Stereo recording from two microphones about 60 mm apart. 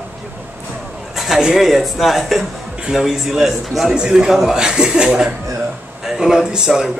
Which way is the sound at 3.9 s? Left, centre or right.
Centre.